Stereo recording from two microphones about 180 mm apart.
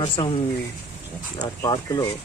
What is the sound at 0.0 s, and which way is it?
Speech, 30° left (ahead or behind).